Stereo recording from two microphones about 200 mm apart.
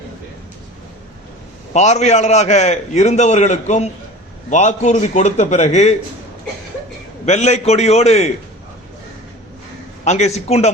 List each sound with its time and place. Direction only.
1.7 s a man's voice: 35° left (ahead or behind)
7.3 s a man's voice: 35° left (ahead or behind)
10.0 s a man's voice: 35° left (ahead or behind)